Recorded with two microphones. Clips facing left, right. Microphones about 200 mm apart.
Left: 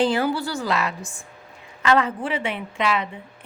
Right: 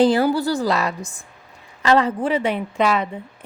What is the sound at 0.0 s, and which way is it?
A woman's voice, 40° right (ahead or behind).